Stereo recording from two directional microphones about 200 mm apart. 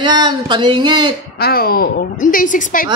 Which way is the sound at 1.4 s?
50° left (ahead or behind).